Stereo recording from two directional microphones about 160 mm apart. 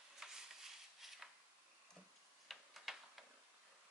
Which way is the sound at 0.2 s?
5° right (ahead or behind).